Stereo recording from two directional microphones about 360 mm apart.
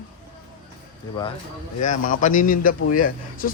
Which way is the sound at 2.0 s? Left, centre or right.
Left.